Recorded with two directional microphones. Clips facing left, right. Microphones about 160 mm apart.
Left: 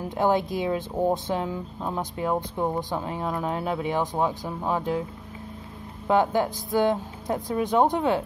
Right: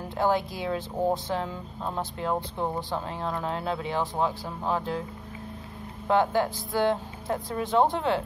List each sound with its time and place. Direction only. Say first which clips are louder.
0.2 s speech: left 3 dB; 20° left (ahead or behind)
6.0 s speech: left 2 dB; 15° left (ahead or behind)